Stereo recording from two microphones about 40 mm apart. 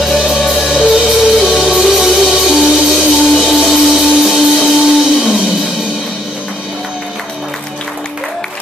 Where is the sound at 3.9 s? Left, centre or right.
Centre.